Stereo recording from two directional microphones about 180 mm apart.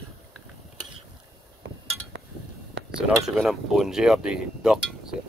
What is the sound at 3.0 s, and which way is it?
Speech, centre (ahead or behind).